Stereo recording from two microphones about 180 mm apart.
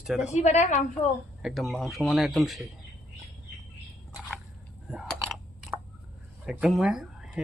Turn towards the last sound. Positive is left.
turn(degrees=-5)  # may be behind; listen again after turning